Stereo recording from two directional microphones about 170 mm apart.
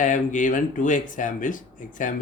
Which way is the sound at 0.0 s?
50° left (ahead or behind).